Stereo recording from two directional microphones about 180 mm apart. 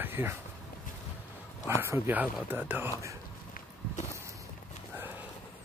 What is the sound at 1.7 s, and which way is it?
Speech, 15° right (ahead or behind).